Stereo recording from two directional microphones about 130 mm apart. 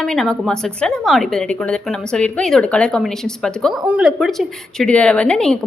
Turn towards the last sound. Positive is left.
turn(degrees=5)  # may be behind; listen again after turning